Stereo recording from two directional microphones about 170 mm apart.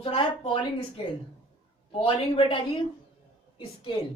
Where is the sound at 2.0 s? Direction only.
30° left (ahead or behind).